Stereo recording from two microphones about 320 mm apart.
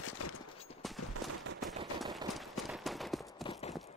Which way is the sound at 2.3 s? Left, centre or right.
Centre.